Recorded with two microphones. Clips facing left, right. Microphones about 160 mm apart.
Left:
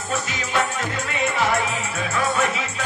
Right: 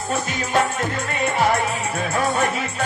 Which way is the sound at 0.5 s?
50° right (ahead or behind).